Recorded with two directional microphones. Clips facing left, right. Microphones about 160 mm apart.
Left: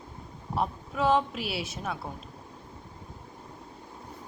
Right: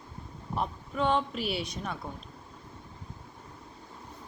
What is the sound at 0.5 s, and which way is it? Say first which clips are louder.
A woman's voice: left 2 dB; 5° left (ahead or behind).